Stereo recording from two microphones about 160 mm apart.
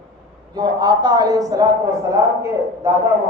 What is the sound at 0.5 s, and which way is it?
A man's voice, 25° right (ahead or behind).